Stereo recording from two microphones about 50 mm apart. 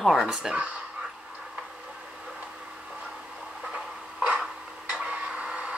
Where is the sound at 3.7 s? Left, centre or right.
Right.